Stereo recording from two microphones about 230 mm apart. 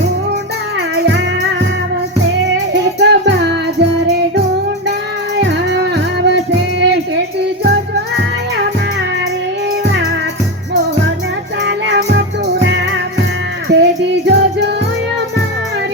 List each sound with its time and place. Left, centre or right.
0.8 s music: right
3.0 s music: right
5.5 s music: right
11.6 s music: right